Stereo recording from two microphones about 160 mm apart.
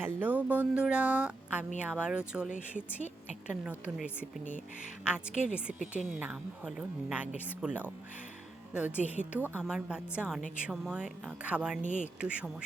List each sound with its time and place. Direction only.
0.0 s speech: 10° right (ahead or behind)
11.8 s speech: 50° right (ahead or behind)
12.2 s speech: 10° right (ahead or behind)